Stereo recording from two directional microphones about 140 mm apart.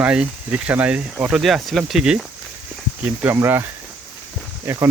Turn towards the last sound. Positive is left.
turn(degrees=-20)  # may be behind; listen again after turning